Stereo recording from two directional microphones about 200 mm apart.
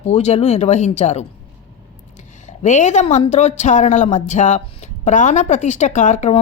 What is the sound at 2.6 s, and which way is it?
A woman's voice, 35° left (ahead or behind).